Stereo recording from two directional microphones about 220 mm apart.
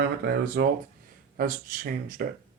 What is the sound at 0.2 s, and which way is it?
Speech, 45° right (ahead or behind).